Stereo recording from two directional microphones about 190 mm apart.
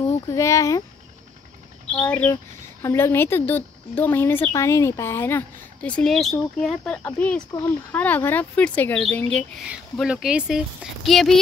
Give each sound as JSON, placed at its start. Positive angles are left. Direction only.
{"t": 0.3, "sound": "speech", "side_deg": 15}
{"t": 1.9, "sound": "speech", "side_deg": 5}